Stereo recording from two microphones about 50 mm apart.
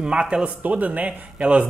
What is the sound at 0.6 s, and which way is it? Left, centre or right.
Speech, right.